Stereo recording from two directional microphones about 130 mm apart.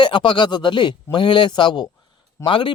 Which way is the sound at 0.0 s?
35° left (ahead or behind).